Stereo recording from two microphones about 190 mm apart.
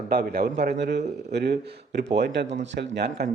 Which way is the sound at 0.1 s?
55° right (ahead or behind).